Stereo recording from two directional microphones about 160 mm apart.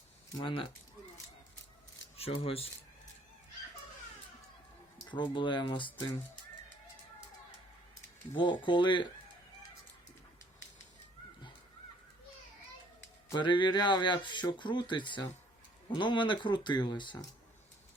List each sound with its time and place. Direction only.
0.3 s speech: 30° left (ahead or behind)
2.1 s speech: 40° left (ahead or behind)
4.9 s speech: 30° left (ahead or behind)
8.6 s speech: 30° left (ahead or behind)
13.3 s speech: 30° left (ahead or behind)